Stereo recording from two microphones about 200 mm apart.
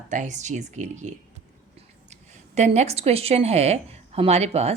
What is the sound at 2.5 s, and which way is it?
A woman's voice, 35° right (ahead or behind).